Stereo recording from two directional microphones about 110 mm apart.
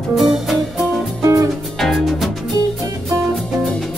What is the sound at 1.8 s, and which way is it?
Music, centre (ahead or behind).